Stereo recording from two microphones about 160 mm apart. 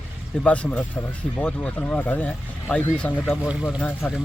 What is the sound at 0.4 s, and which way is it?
Speech, 10° left (ahead or behind).